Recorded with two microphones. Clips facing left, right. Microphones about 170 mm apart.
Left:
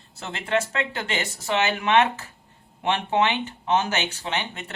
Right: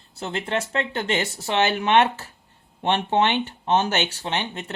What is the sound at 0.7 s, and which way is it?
Speech, 30° right (ahead or behind).